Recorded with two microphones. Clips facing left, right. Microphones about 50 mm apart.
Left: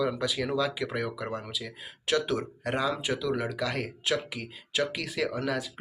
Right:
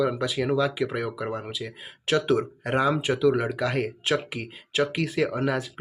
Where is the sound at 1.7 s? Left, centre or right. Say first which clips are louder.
Right 3 dB; right.